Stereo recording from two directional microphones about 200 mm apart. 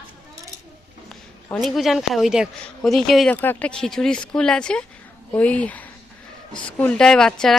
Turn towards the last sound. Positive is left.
turn(degrees=5)  # may be behind; listen again after turning